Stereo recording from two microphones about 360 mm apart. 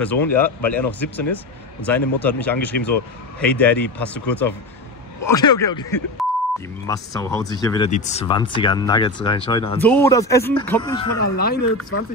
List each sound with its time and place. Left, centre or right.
0.0 s speech: centre
6.9 s speech: centre
11.3 s speech: left